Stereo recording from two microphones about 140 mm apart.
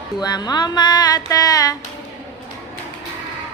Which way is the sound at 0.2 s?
30° left (ahead or behind).